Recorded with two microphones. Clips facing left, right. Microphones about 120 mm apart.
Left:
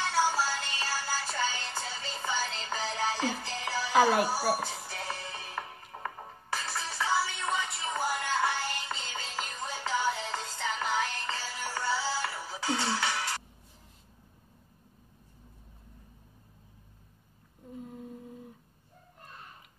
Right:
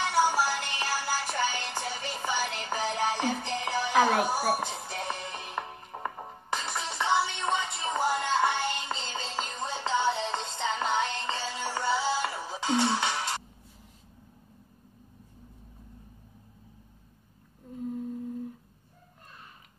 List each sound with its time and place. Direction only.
0.0 s music: 15° right (ahead or behind)
17.8 s humming: centre (ahead or behind)